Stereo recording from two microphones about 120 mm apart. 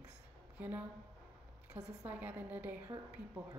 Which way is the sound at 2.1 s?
15° right (ahead or behind).